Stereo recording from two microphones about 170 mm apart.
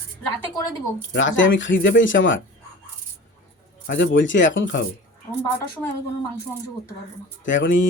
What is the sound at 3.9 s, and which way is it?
Speech, 90° left.